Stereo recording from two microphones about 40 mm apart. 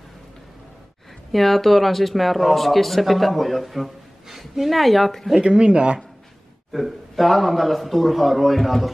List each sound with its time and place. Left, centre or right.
1.3 s speech: centre
5.4 s speech: right
6.7 s speech: centre